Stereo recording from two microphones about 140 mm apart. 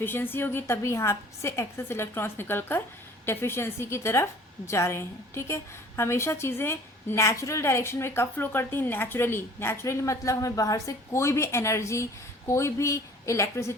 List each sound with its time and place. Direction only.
0.0 s a woman's voice: 15° left (ahead or behind)